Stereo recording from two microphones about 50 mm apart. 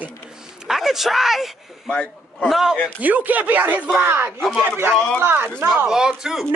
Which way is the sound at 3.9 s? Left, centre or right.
Right.